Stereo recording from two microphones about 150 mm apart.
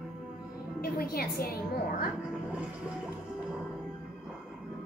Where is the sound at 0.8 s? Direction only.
85° left.